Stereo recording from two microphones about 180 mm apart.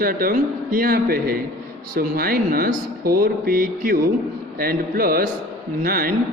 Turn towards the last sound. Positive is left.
turn(degrees=-55)  # may be behind; listen again after turning